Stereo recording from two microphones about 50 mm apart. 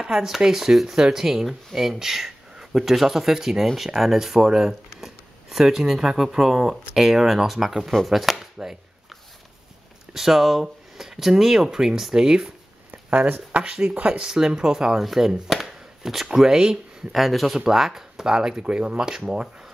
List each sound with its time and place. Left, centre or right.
0.0 s speech: centre
10.1 s speech: centre
13.1 s speech: right
17.1 s speech: centre